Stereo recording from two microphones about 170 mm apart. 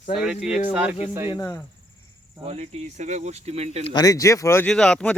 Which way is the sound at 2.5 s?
40° right (ahead or behind).